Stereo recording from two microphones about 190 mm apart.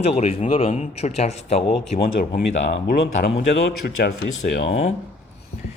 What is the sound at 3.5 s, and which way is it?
Speech, 65° left (ahead or behind).